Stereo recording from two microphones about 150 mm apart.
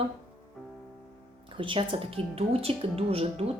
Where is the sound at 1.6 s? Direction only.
35° right (ahead or behind).